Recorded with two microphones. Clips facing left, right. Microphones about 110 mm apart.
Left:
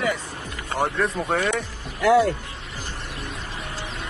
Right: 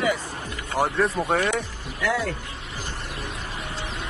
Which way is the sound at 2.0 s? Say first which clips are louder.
Left 8 dB; 40° left (ahead or behind).